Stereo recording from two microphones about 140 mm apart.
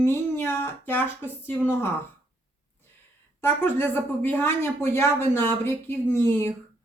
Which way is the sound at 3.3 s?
15° left (ahead or behind).